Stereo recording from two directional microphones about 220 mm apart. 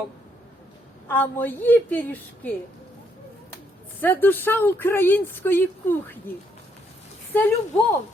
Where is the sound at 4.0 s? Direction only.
10° left (ahead or behind).